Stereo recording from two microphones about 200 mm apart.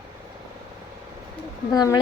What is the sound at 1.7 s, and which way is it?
Speech, 20° left (ahead or behind).